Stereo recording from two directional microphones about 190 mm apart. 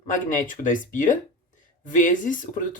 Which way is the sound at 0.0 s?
40° left (ahead or behind).